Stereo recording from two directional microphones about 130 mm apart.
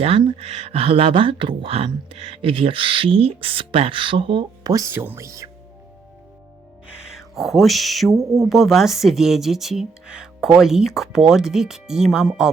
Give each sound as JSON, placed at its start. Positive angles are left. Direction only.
{"t": 0.0, "sound": "speech", "side_deg": -45}
{"t": 4.7, "sound": "speech", "side_deg": -20}
{"t": 6.8, "sound": "music", "side_deg": -5}
{"t": 8.4, "sound": "speech", "side_deg": 0}